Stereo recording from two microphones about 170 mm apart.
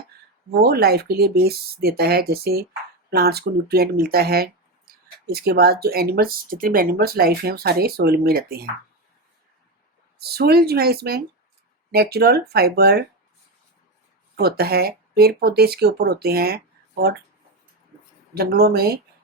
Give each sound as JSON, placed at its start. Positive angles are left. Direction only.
{"t": 0.6, "sound": "speech", "side_deg": -65}
{"t": 10.2, "sound": "speech", "side_deg": -65}
{"t": 14.3, "sound": "speech", "side_deg": -65}
{"t": 18.3, "sound": "speech", "side_deg": -65}